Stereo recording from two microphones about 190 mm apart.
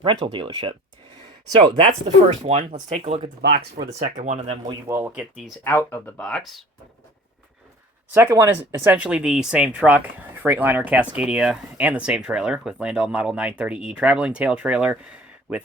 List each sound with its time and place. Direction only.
0.0 s speech: 25° right (ahead or behind)
3.4 s speech: 55° right (ahead or behind)
3.9 s speech: 40° right (ahead or behind)
4.9 s speech: 10° right (ahead or behind)
5.6 s speech: 10° left (ahead or behind)
8.1 s speech: 15° right (ahead or behind)